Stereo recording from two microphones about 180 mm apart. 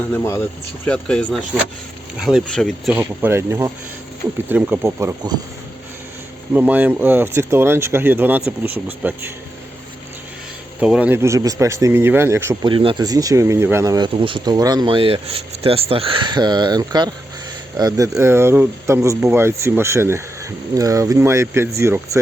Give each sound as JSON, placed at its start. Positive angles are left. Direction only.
{"t": 0.1, "sound": "speech", "side_deg": 15}
{"t": 2.9, "sound": "speech", "side_deg": -10}
{"t": 6.5, "sound": "speech", "side_deg": -10}
{"t": 10.8, "sound": "speech", "side_deg": -5}
{"t": 12.6, "sound": "speech", "side_deg": -30}